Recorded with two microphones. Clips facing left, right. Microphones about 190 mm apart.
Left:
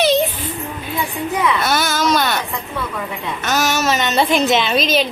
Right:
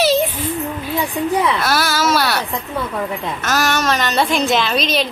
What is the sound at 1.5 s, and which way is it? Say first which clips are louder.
Baby cry: even; centre (ahead or behind).